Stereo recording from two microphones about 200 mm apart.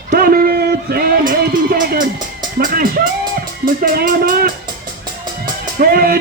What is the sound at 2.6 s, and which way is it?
A man's voice, 45° right (ahead or behind).